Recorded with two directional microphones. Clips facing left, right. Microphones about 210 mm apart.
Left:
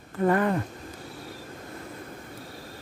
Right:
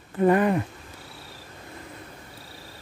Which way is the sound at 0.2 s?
15° right (ahead or behind).